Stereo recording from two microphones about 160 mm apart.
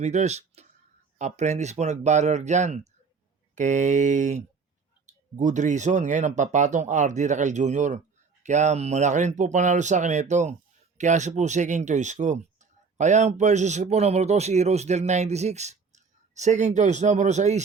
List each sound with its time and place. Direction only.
0.0 s speech: 45° right (ahead or behind)